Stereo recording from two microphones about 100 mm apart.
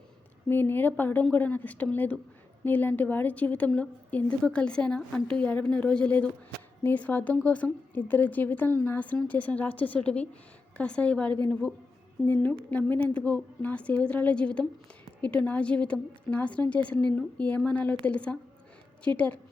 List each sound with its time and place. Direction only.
0.4 s a woman's voice: 20° left (ahead or behind)